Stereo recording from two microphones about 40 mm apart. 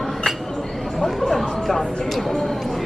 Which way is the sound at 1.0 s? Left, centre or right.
Centre.